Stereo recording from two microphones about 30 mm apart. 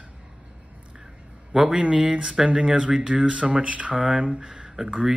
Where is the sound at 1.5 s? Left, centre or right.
Right.